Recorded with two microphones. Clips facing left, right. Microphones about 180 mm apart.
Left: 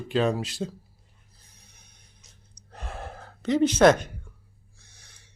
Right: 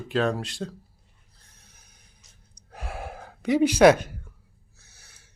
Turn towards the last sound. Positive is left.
turn(degrees=-5)  # may be behind; listen again after turning